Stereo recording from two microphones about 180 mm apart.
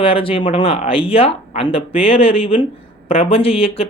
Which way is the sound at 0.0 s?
30° left (ahead or behind).